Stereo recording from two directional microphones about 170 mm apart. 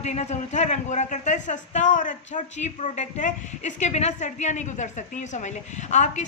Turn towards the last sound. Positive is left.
turn(degrees=45)  # may be behind; listen again after turning